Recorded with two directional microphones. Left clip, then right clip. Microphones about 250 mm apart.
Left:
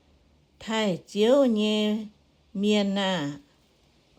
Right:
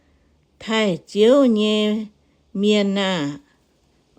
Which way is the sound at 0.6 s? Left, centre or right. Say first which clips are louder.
Right 7 dB; right.